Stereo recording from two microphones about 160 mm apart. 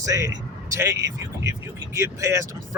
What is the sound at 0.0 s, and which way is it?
Speech, 20° right (ahead or behind).